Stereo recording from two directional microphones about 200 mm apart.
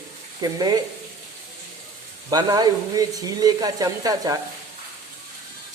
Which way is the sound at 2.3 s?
20° right (ahead or behind).